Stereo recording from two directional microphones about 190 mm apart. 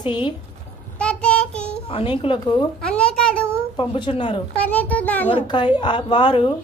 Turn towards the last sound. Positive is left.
turn(degrees=25)  # may be behind; listen again after turning